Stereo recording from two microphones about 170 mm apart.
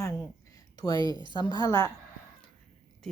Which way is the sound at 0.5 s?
20° left (ahead or behind).